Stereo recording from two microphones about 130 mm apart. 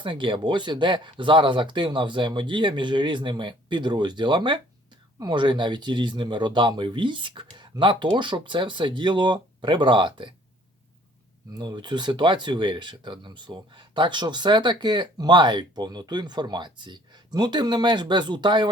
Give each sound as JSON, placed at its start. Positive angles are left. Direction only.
{"t": 0.0, "sound": "speech", "side_deg": -40}
{"t": 11.5, "sound": "speech", "side_deg": -35}